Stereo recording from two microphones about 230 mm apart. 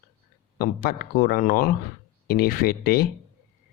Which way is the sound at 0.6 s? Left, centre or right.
Left.